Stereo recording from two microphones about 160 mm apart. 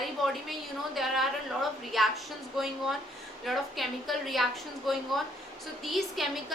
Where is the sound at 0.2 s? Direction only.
Centre (ahead or behind).